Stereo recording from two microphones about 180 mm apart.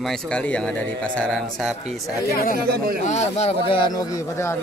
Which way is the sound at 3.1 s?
40° left (ahead or behind).